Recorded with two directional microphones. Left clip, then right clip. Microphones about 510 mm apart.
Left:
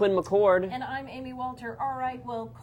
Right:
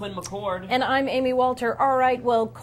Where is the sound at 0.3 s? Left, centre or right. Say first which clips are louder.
Left 6 dB; left.